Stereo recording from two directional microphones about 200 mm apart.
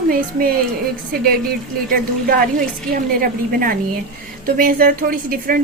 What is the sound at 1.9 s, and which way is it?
A woman's voice, 50° right (ahead or behind).